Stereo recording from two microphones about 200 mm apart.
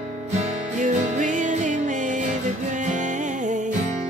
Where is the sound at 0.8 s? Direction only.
35° right (ahead or behind).